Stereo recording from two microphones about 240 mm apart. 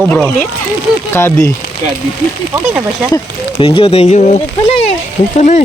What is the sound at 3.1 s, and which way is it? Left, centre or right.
Speech, left.